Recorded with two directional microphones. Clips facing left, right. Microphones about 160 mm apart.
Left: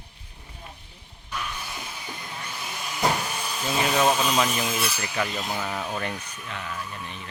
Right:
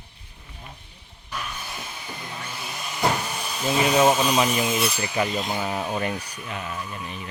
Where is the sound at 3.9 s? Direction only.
20° right (ahead or behind).